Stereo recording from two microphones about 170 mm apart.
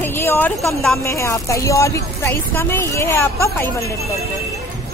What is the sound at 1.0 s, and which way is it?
Speech, 15° left (ahead or behind).